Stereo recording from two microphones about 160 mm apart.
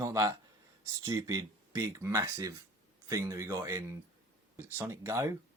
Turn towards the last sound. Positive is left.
turn(degrees=-20)  # may be behind; listen again after turning